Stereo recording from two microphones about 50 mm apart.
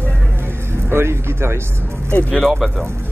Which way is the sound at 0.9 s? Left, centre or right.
Right.